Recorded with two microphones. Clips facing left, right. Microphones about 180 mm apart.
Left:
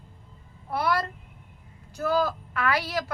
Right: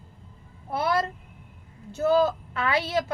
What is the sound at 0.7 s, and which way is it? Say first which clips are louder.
Speech: right 1 dB; 25° right (ahead or behind).